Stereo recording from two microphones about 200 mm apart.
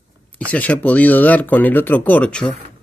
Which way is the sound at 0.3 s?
5° left (ahead or behind).